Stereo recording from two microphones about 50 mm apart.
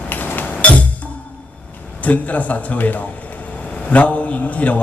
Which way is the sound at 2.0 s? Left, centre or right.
Left.